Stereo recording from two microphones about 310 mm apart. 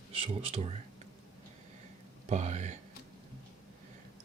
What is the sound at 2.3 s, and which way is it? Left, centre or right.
Speech, right.